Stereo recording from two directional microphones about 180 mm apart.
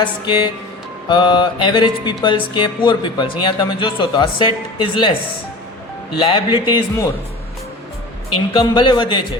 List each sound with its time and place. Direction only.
0.0 s mantra: 25° left (ahead or behind)
6.1 s mantra: 25° left (ahead or behind)
8.5 s mantra: 25° left (ahead or behind)